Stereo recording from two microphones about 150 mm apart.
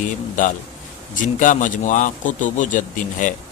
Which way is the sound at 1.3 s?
60° left (ahead or behind).